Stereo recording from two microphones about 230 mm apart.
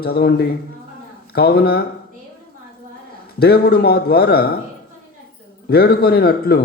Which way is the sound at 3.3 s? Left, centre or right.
Left.